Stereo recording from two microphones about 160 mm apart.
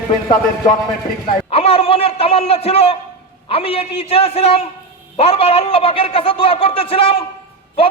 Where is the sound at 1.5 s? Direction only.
35° left (ahead or behind).